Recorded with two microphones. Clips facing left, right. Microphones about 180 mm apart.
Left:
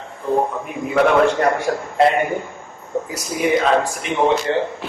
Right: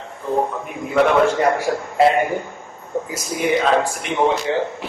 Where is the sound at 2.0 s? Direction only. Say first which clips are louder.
Right 1 dB; centre (ahead or behind).